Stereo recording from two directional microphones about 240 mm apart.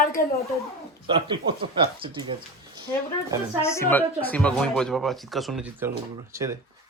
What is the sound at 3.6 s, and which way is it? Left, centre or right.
A woman's voice, centre.